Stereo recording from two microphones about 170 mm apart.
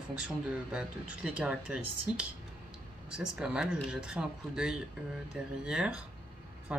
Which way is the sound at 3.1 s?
5° right (ahead or behind).